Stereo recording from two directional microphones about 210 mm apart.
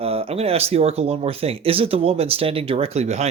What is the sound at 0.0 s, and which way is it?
Speech, 30° right (ahead or behind).